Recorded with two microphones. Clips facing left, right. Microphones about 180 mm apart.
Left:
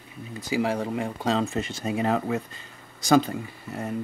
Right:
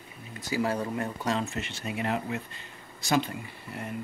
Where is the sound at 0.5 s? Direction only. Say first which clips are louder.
Left 3 dB; 20° left (ahead or behind).